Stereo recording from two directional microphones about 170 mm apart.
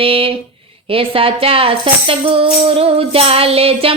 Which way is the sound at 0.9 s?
35° right (ahead or behind).